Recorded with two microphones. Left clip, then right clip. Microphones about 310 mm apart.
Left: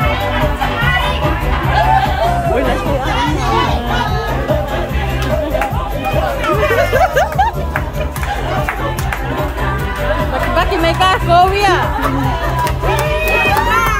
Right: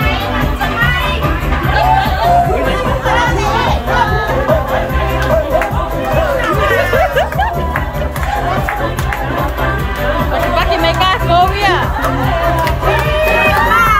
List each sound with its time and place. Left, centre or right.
10.5 s music: left